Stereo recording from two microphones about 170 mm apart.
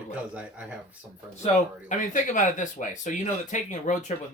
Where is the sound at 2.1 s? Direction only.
50° left (ahead or behind).